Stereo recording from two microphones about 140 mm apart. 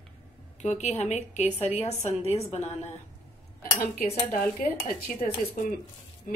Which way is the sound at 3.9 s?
80° left.